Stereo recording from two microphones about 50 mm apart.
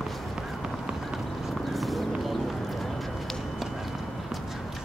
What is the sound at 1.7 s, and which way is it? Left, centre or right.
Clip-clop, centre.